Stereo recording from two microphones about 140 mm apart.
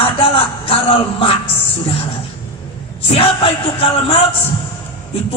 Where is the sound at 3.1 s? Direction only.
40° left (ahead or behind).